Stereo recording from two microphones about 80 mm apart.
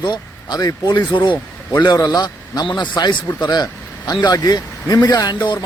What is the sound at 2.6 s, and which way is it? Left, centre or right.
Speech, left.